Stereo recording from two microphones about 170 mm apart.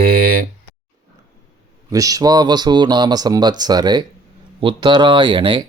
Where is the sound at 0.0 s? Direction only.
60° right (ahead or behind).